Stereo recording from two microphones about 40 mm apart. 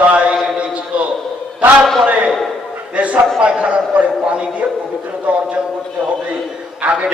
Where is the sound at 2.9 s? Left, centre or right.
Right.